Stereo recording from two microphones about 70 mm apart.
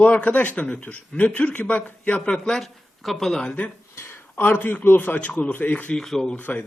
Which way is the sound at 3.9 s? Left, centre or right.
Left.